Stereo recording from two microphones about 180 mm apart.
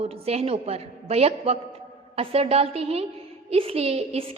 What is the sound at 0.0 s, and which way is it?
A woman's voice, 35° right (ahead or behind).